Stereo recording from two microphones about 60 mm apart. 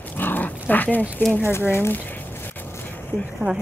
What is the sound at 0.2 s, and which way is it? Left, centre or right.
Dog, left.